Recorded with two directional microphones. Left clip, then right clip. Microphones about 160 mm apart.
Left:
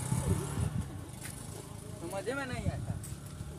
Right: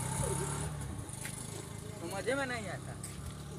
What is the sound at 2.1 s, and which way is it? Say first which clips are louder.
Vehicle: right 2 dB; 20° left (ahead or behind).